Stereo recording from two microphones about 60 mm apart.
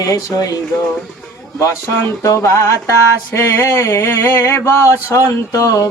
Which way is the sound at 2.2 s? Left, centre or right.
Left.